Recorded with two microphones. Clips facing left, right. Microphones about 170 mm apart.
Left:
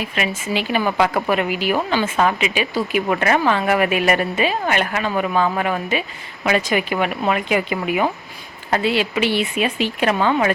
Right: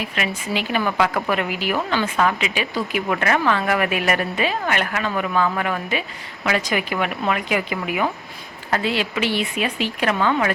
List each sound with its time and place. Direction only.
0.2 s a woman's voice: 20° left (ahead or behind)